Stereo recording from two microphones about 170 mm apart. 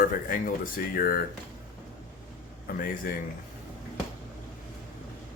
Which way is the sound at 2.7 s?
55° left (ahead or behind).